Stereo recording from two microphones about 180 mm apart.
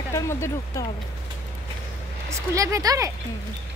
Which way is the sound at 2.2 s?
20° right (ahead or behind).